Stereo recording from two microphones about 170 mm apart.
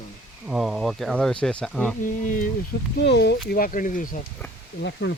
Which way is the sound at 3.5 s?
55° left (ahead or behind).